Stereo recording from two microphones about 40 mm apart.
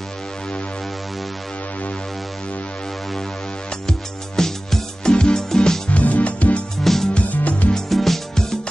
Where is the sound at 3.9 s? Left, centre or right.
Centre.